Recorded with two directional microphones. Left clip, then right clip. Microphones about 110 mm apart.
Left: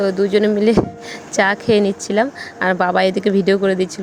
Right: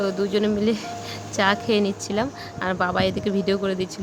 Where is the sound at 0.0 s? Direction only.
40° left (ahead or behind).